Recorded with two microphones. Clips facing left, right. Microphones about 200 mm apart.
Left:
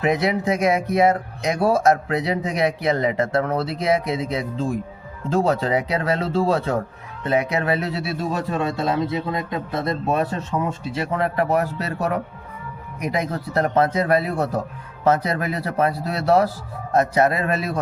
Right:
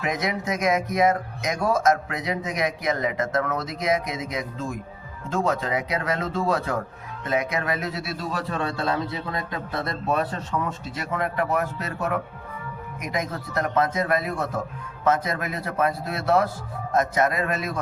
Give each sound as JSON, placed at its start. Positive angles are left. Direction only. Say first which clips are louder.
{"t": 0.0, "sound": "speech", "louder": "left 7 dB", "side_deg": 30}
{"t": 8.3, "sound": "a man's voice", "louder": "left 3 dB", "side_deg": 20}